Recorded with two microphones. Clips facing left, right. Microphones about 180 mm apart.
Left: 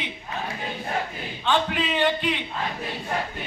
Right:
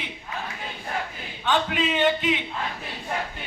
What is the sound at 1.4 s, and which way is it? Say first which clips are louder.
Speech: even; 15° right (ahead or behind).